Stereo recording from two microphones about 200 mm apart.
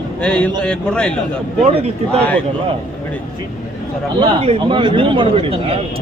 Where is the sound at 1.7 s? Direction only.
30° right (ahead or behind).